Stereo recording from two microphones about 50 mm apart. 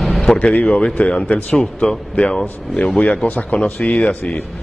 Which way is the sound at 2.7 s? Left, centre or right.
Left.